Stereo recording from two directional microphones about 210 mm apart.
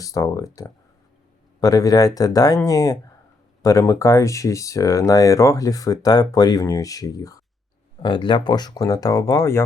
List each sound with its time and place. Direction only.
0.0 s speech: 15° left (ahead or behind)